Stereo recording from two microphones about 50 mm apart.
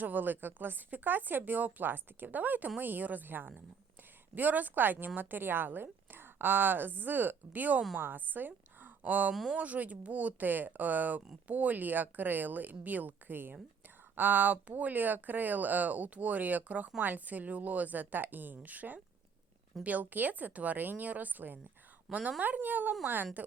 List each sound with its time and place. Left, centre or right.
0.0 s speech: right
9.3 s speech: centre
9.6 s speech: right